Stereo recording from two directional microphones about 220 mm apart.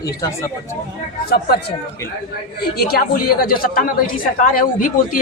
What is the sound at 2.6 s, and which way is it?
A woman's voice, 45° left (ahead or behind).